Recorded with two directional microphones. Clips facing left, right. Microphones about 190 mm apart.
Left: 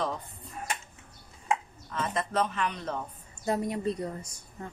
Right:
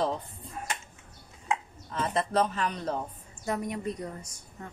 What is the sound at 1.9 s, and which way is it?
A man's voice, 30° right (ahead or behind).